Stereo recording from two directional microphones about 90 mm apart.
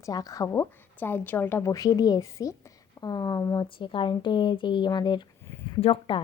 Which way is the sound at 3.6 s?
70° left (ahead or behind).